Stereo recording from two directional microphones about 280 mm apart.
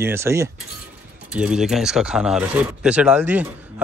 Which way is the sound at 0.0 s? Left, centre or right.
Centre.